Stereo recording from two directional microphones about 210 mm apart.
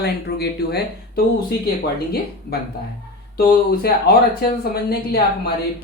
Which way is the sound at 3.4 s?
45° left (ahead or behind).